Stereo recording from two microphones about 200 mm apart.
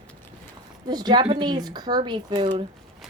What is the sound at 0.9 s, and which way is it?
Speech, 20° right (ahead or behind).